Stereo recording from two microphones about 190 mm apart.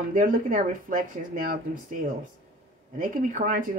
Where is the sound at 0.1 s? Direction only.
45° right (ahead or behind).